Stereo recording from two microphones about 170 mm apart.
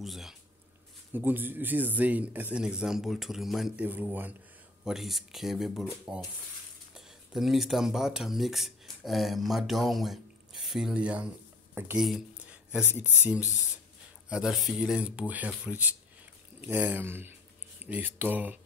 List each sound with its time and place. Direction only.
0.0 s speech: centre (ahead or behind)
11.7 s a sound: 5° right (ahead or behind)
13.2 s speech: 10° right (ahead or behind)